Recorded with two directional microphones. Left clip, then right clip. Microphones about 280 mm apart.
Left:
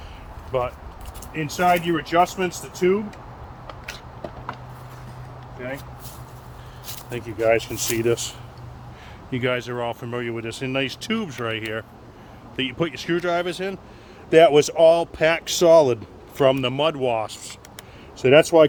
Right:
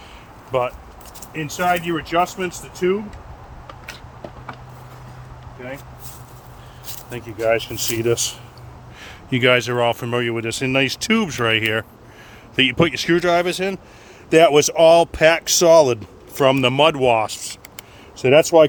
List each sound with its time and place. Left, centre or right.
0.5 s speech: right
1.3 s speech: centre
3.7 s a sound: centre
5.5 s speech: centre
7.1 s speech: centre